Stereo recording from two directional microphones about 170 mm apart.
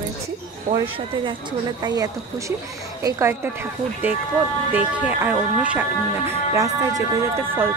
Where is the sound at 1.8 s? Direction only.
25° right (ahead or behind).